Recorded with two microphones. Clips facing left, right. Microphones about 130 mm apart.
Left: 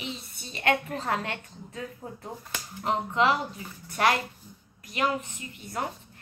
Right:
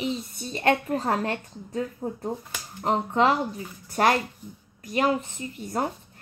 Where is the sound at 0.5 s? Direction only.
40° right (ahead or behind).